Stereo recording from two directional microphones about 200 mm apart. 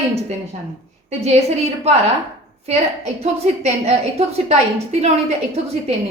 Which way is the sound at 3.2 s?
30° right (ahead or behind).